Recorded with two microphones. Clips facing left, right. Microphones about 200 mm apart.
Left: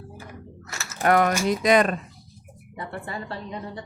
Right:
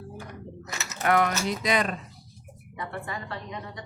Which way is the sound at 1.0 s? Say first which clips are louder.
Left 4 dB; 45° left (ahead or behind).